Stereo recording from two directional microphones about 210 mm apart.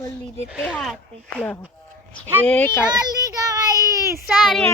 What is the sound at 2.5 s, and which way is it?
Speech, 10° left (ahead or behind).